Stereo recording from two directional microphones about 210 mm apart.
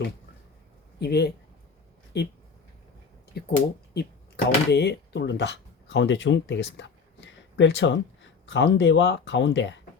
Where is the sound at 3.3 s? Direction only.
50° left (ahead or behind).